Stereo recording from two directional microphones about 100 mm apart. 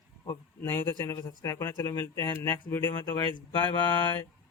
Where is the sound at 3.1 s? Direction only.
50° left (ahead or behind).